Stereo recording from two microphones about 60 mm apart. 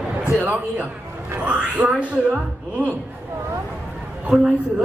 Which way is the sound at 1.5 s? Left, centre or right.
Right.